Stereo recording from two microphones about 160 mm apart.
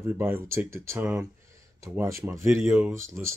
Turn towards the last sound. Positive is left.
turn(degrees=-15)  # may be behind; listen again after turning